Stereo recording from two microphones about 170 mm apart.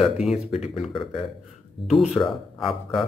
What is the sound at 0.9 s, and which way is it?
Speech, 30° left (ahead or behind).